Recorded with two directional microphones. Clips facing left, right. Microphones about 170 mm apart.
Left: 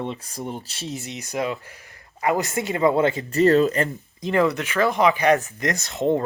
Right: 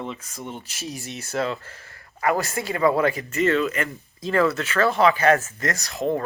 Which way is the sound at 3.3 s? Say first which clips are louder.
Left 5 dB; 35° left (ahead or behind).